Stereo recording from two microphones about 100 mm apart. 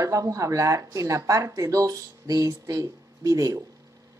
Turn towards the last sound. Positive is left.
turn(degrees=-35)  # may be behind; listen again after turning